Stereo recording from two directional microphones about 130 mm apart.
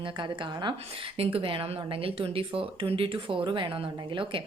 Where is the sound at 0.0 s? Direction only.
35° right (ahead or behind).